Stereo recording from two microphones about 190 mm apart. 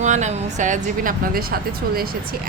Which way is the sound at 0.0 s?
40° right (ahead or behind).